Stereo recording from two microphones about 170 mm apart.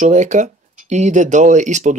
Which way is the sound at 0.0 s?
45° right (ahead or behind).